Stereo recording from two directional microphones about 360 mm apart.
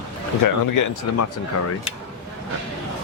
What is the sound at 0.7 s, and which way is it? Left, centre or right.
Speech, left.